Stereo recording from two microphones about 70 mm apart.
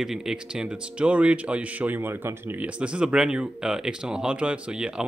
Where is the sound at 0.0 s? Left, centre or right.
Centre; by 2.6 s right.